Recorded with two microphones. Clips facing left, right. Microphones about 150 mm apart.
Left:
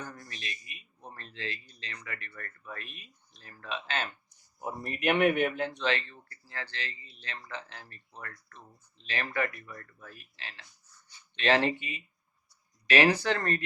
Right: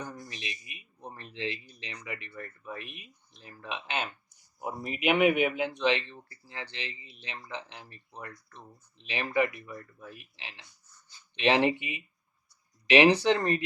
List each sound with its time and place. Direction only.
0.0 s a man's voice: 15° right (ahead or behind)